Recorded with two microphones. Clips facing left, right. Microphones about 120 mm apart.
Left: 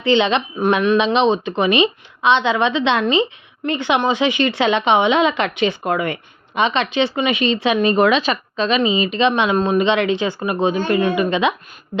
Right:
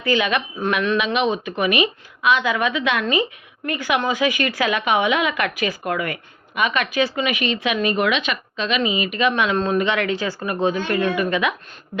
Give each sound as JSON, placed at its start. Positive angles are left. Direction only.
{"t": 0.0, "sound": "speech", "side_deg": 25}